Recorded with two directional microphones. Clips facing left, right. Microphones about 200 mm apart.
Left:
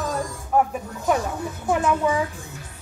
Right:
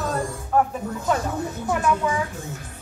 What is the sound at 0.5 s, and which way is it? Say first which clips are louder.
A child's voice: even; 10° left (ahead or behind).